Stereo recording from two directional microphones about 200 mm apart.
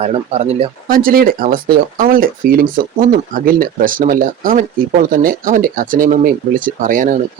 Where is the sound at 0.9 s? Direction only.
45° right (ahead or behind).